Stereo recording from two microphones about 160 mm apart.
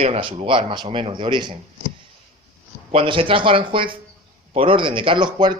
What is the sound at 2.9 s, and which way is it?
A man's voice, 35° right (ahead or behind).